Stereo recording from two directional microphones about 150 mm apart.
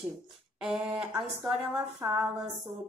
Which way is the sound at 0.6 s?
5° right (ahead or behind).